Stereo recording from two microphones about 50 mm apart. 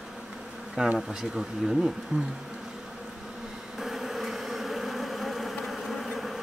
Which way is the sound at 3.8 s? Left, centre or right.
Centre.